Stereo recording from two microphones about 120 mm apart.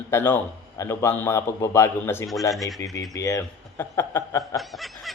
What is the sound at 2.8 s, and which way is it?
A man's voice, 30° left (ahead or behind).